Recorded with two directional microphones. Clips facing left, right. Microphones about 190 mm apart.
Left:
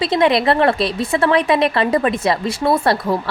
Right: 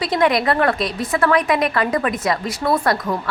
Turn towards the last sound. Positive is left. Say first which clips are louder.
# left 3 dB
turn(degrees=25)  # may be behind; listen again after turning